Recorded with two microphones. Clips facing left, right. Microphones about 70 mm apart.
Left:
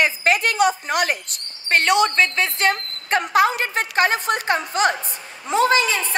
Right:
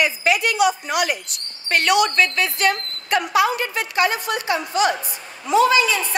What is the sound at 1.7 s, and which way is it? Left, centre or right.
A woman's voice, left.